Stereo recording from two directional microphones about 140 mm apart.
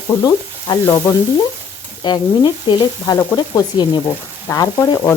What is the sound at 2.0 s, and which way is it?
Sizzle, 30° left (ahead or behind).